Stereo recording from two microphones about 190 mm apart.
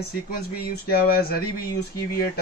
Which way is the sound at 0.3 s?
55° left (ahead or behind).